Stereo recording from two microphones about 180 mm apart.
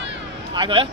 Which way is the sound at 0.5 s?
25° right (ahead or behind).